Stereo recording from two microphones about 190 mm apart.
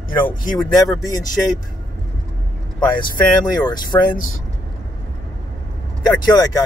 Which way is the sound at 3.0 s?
20° left (ahead or behind).